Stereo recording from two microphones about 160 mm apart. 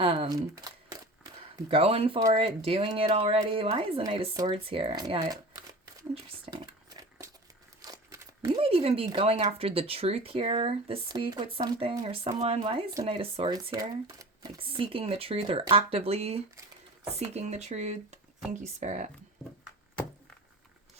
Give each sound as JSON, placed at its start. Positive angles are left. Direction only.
{"t": 0.0, "sound": "speech", "side_deg": -35}
{"t": 0.5, "sound": "camera", "side_deg": -25}
{"t": 2.3, "sound": "speech", "side_deg": -35}
{"t": 6.5, "sound": "a sound", "side_deg": -25}
{"t": 8.5, "sound": "speech", "side_deg": -35}